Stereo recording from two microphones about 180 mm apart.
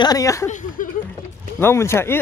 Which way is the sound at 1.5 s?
15° left (ahead or behind).